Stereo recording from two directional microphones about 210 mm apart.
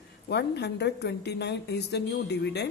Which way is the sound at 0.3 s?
55° left (ahead or behind).